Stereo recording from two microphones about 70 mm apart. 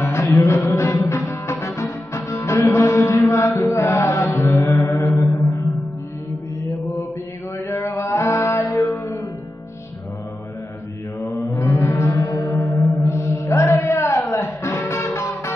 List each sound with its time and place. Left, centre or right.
0.0 s music: left
7.6 s music: left
11.5 s music: left
12.5 s chant: left